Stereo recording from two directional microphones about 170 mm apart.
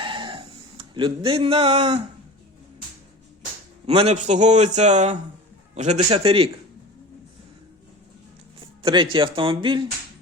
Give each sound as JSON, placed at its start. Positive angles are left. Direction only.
{"t": 0.0, "sound": "a sound", "side_deg": -30}
{"t": 3.8, "sound": "a man's voice", "side_deg": -40}
{"t": 8.8, "sound": "speech", "side_deg": -30}